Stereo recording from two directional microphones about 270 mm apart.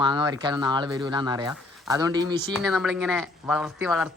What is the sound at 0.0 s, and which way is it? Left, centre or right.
Speech, centre.